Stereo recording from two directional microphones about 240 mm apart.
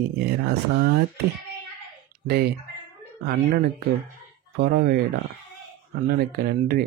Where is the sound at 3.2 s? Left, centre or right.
Right.